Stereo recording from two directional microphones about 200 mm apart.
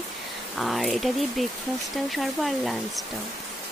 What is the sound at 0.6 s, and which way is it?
Speech, centre (ahead or behind).